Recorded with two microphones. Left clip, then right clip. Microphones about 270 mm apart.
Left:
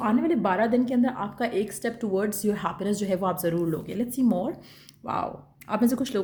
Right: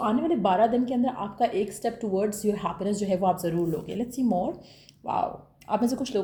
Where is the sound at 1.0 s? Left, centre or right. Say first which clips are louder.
Right 2 dB; left.